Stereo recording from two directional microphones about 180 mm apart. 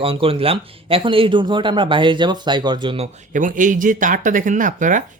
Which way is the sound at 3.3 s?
45° right (ahead or behind).